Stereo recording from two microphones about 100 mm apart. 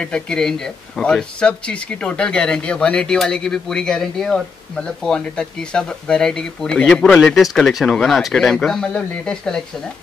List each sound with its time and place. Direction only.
0.0 s speech: 10° left (ahead or behind)